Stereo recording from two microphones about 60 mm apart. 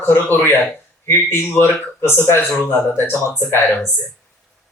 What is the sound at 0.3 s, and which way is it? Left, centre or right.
A man's voice, left.